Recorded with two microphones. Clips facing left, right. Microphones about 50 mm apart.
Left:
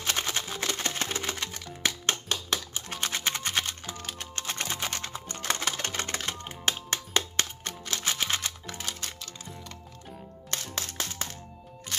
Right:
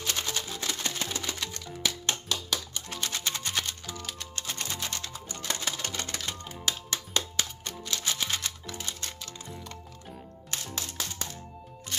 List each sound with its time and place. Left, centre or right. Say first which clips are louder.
0.0 s music: left 2 dB; left
0.6 s music: left 2 dB; left
5.3 s music: left 3 dB; left
8.0 s music: left 3 dB; left
10.5 s music: left 2 dB; left